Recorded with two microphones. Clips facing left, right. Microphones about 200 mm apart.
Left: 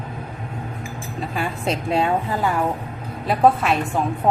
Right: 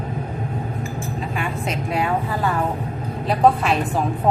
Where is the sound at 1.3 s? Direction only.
35° left (ahead or behind).